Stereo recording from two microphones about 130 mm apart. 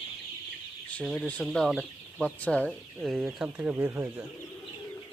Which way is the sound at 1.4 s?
Centre (ahead or behind).